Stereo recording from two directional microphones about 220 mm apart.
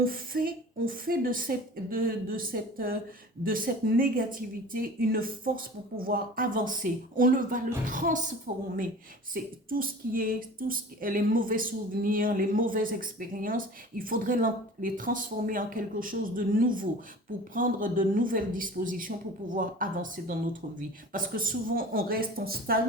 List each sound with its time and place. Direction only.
0.0 s speech: 40° right (ahead or behind)